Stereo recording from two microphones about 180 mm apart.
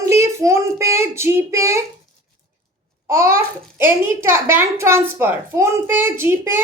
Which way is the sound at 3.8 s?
15° right (ahead or behind).